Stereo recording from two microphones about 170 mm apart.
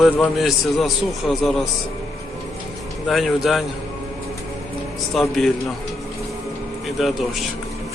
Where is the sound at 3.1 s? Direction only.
Centre (ahead or behind).